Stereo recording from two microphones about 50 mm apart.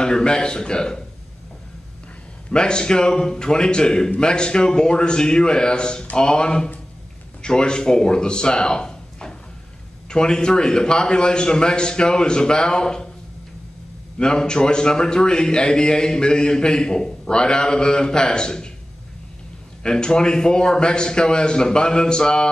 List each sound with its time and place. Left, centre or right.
0.0 s a man's voice: centre
2.5 s a man's voice: centre
14.1 s a man's voice: centre
19.8 s a man's voice: centre